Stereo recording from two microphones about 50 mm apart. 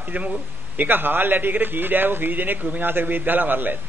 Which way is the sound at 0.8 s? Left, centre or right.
Right.